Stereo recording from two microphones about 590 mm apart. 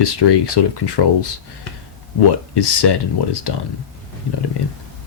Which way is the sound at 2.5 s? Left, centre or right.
Left.